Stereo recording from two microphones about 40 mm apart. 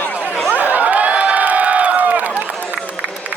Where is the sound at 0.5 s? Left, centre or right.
Right.